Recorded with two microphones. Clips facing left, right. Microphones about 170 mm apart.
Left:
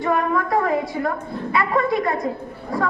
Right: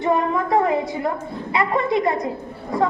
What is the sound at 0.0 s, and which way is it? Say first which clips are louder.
A woman's voice: right 1 dB; 20° right (ahead or behind).